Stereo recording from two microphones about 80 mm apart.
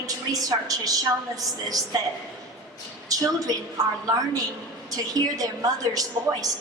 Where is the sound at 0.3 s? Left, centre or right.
Right.